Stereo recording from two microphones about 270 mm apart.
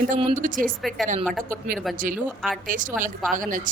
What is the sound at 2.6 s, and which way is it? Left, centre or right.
Speech, right.